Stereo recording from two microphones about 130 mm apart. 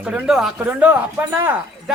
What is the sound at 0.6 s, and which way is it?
Speech, 15° right (ahead or behind).